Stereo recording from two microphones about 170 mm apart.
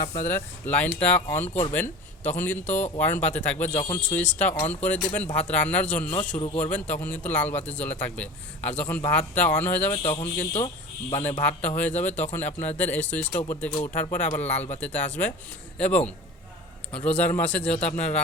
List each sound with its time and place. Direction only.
0.0 s a man's voice: 15° left (ahead or behind)
10.0 s speech: 25° left (ahead or behind)
11.1 s a man's voice: 10° left (ahead or behind)